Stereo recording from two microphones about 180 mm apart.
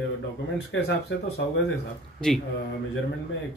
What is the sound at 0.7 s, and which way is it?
Speech, 90° left.